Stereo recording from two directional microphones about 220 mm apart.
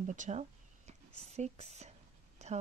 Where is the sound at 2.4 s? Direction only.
30° right (ahead or behind).